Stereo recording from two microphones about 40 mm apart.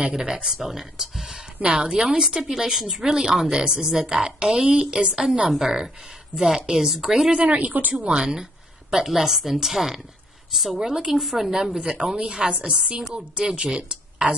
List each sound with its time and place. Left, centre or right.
0.1 s a woman's voice: centre
1.6 s a woman's voice: centre
3.1 s a woman's voice: centre
7.5 s speech: right
8.0 s a woman's voice: centre